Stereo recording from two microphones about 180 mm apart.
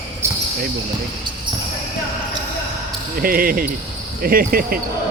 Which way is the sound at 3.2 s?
50° right (ahead or behind).